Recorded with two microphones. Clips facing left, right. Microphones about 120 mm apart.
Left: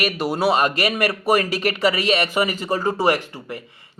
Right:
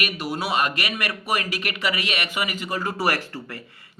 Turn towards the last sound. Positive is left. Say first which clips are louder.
# left 5 dB
turn(degrees=20)  # may be behind; listen again after turning